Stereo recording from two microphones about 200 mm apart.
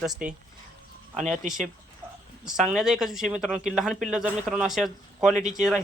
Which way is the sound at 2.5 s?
Centre (ahead or behind).